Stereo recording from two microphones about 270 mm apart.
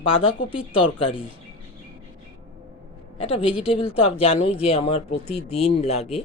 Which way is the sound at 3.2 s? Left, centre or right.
Left.